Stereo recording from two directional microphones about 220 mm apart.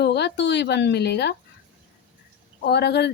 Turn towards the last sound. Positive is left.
turn(degrees=50)  # may be behind; listen again after turning